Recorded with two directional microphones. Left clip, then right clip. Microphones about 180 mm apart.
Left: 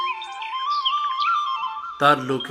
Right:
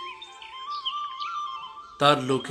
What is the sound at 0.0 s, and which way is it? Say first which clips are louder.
Music: left 12 dB; 45° left (ahead or behind).